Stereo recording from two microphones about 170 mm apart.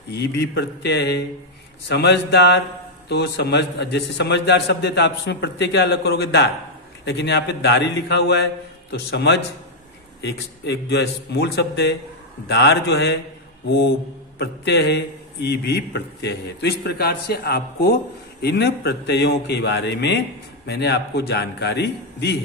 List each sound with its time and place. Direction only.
0.1 s a man's voice: 80° left
14.4 s a man's voice: 90° left